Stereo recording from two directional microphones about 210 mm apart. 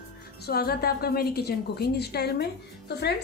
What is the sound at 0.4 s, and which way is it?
A woman's voice, 45° left (ahead or behind).